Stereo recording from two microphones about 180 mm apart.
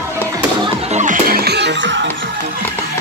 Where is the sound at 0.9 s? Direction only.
45° right (ahead or behind); by 2.1 s 85° right.